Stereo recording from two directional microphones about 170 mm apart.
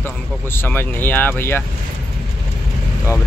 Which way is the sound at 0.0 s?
15° left (ahead or behind).